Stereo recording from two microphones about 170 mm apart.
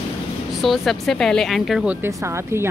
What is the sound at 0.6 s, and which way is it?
Speech, centre (ahead or behind).